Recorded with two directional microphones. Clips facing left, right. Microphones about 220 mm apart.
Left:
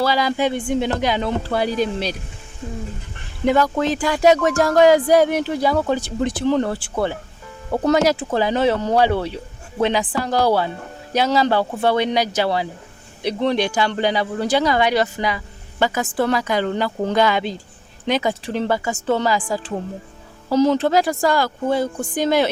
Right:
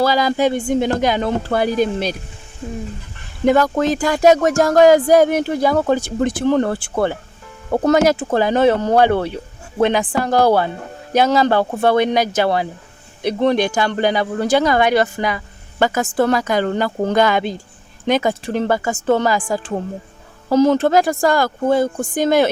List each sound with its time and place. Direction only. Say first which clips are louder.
0.0 s speech: right 3 dB; 45° right (ahead or behind)
3.4 s speech: right 3 dB; 45° right (ahead or behind)